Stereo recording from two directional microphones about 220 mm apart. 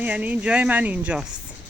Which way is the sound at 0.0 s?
5° right (ahead or behind).